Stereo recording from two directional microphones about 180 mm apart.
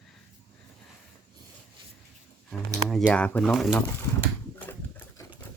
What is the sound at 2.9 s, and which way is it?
Speech, 5° left (ahead or behind).